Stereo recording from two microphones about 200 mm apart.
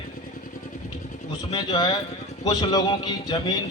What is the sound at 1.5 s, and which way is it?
A man's voice, 20° left (ahead or behind).